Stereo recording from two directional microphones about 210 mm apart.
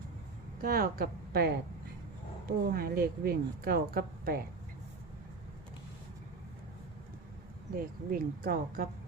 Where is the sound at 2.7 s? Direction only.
45° right (ahead or behind).